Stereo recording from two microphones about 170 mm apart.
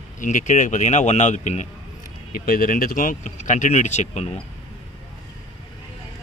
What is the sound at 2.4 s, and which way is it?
Speech, 55° left (ahead or behind).